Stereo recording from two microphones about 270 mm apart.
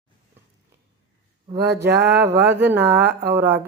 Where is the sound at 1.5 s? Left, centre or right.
Right.